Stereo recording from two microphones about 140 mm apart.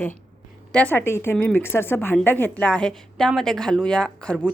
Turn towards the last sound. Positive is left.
turn(degrees=5)  # may be behind; listen again after turning